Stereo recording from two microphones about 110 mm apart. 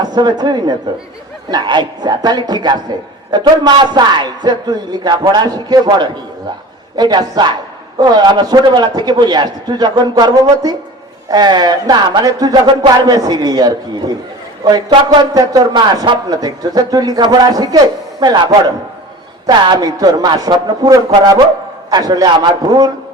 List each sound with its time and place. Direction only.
0.0 s a man's voice: 40° right (ahead or behind)